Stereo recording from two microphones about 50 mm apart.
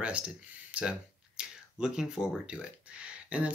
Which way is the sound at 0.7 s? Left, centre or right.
Right.